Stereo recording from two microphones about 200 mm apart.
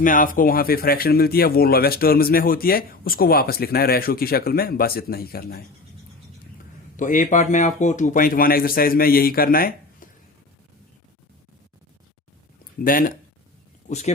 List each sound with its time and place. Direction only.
0.0 s speech: 40° left (ahead or behind)
6.9 s speech: 40° left (ahead or behind)
12.8 s speech: 45° left (ahead or behind)